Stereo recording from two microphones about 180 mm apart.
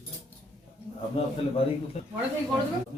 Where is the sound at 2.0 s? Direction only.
35° left (ahead or behind).